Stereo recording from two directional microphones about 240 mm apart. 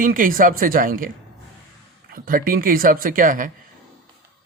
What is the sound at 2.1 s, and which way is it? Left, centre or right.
Speech, right.